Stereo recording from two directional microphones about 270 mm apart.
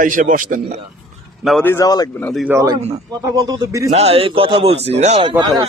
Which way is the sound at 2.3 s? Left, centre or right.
Centre.